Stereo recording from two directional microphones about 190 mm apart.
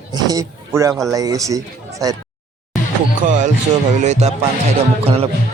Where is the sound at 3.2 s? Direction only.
40° right (ahead or behind).